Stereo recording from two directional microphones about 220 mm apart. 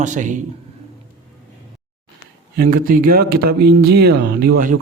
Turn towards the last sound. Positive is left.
turn(degrees=-40)  # may be behind; listen again after turning